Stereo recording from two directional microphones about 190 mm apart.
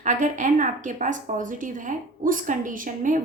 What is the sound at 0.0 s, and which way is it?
A woman's voice, 40° right (ahead or behind).